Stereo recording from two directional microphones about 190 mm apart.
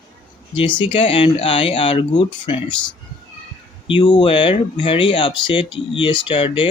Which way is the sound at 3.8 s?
25° left (ahead or behind).